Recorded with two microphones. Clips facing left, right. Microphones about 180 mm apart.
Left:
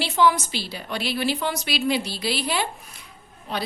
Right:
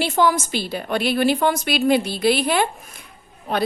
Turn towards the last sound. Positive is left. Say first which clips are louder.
# right 6 dB
turn(degrees=-45)  # may be behind; listen again after turning